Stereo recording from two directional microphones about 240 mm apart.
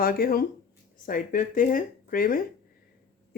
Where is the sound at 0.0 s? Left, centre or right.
Left.